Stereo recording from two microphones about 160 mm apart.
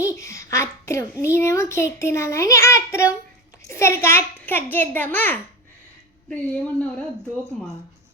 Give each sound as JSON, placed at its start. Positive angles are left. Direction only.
{"t": 0.0, "sound": "a child's voice", "side_deg": 20}